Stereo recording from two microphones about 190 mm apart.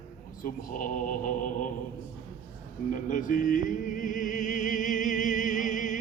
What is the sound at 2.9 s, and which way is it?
Music, 45° left (ahead or behind).